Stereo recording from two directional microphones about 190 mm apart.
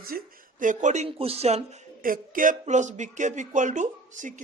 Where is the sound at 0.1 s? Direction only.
50° right (ahead or behind).